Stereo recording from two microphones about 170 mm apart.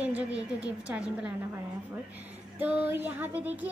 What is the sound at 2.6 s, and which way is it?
A woman's voice, 10° right (ahead or behind).